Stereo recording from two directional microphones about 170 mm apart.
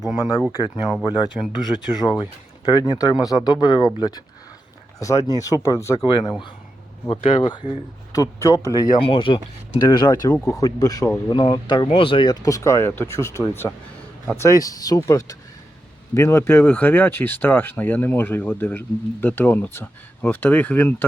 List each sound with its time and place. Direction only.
0.2 s speech: 20° left (ahead or behind)
7.1 s speech: 30° left (ahead or behind)
9.0 s speech: 30° left (ahead or behind)
12.5 s speech: 15° left (ahead or behind)